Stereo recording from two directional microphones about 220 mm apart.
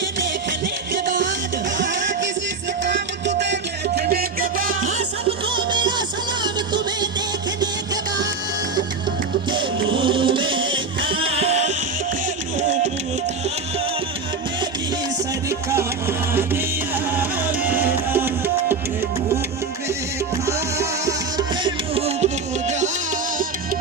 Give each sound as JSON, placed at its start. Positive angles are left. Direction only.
{"t": 1.8, "sound": "music", "side_deg": -55}
{"t": 5.5, "sound": "music", "side_deg": -20}
{"t": 9.5, "sound": "music", "side_deg": -20}
{"t": 15.4, "sound": "music", "side_deg": -10}
{"t": 17.2, "sound": "music", "side_deg": -10}
{"t": 20.5, "sound": "music", "side_deg": -15}